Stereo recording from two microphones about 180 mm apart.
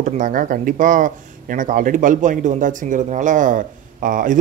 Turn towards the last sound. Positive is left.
turn(degrees=-50)  # may be behind; listen again after turning